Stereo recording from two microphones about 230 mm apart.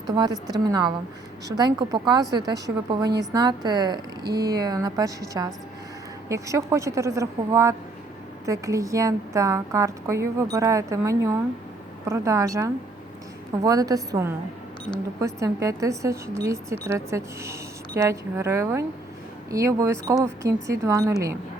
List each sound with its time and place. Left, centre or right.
0.1 s speech: centre